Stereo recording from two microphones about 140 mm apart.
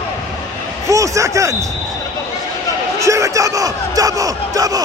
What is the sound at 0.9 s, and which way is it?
Speech, 20° right (ahead or behind).